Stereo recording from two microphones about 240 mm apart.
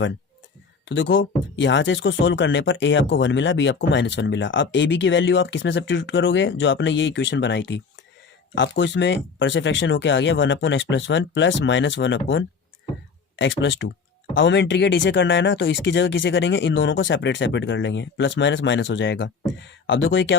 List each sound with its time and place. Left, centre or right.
0.9 s speech: left